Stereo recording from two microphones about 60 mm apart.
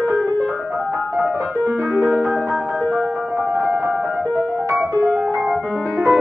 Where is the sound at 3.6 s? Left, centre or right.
Right.